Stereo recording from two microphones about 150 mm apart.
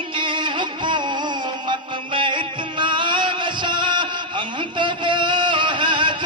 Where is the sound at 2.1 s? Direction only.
35° right (ahead or behind).